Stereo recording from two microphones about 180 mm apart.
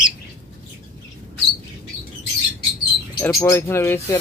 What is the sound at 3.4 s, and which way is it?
Speech, 15° left (ahead or behind).